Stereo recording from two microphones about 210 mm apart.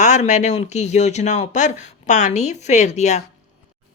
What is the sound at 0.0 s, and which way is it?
Speech, 35° left (ahead or behind).